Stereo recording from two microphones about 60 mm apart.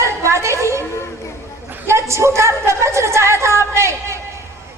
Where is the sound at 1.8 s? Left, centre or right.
Right.